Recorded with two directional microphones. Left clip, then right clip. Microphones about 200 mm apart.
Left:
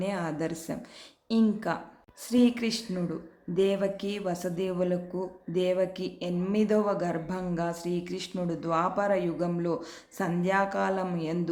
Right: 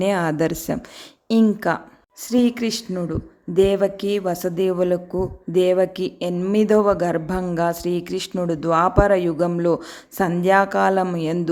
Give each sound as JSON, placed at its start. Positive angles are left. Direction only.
{"t": 0.0, "sound": "speech", "side_deg": -45}